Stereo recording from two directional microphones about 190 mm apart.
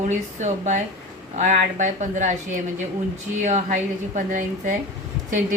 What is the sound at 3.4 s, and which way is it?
Speech, 40° right (ahead or behind).